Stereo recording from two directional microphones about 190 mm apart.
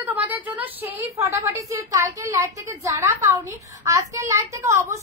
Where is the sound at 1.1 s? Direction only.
15° right (ahead or behind).